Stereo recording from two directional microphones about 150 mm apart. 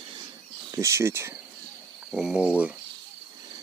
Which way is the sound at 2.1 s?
5° right (ahead or behind).